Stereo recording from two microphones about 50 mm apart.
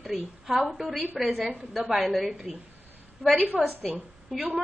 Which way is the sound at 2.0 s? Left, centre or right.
Centre.